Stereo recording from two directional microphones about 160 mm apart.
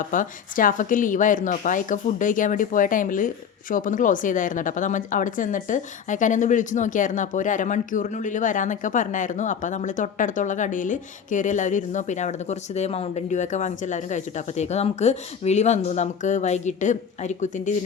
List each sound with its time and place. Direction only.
0.0 s speech: 55° left (ahead or behind)